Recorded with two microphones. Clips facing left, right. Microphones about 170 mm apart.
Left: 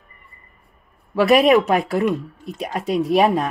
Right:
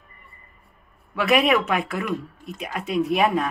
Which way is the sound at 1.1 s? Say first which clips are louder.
Left 6 dB; 35° left (ahead or behind).